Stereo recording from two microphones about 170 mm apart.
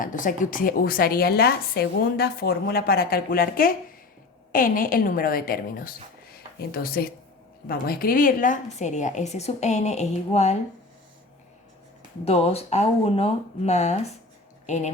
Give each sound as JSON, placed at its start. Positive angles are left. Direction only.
{"t": 0.0, "sound": "a woman's voice", "side_deg": 50}
{"t": 12.2, "sound": "speech", "side_deg": 35}